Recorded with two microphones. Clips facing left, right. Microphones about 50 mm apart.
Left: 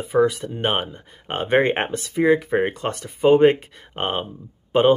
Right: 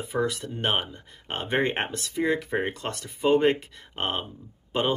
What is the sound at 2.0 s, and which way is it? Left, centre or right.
Speech, centre.